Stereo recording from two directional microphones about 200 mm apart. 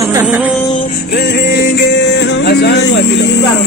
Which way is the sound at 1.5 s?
60° left (ahead or behind).